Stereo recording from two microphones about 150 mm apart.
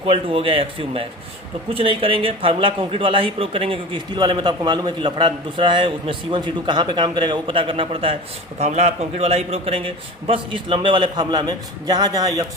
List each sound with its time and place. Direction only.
0.0 s a man's voice: 40° right (ahead or behind)